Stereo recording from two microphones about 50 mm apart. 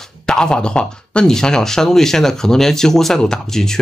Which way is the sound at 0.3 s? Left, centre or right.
Centre.